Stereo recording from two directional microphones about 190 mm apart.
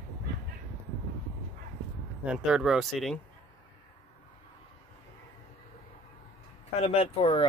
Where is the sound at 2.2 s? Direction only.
5° right (ahead or behind).